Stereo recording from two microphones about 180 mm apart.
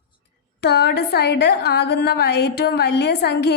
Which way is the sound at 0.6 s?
65° left (ahead or behind).